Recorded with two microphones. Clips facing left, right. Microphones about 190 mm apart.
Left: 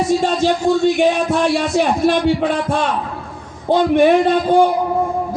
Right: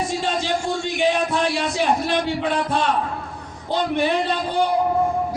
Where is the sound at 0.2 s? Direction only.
45° left (ahead or behind).